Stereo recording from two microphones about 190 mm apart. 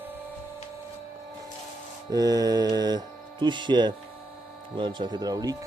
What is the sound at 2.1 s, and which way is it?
Mantra, 20° right (ahead or behind).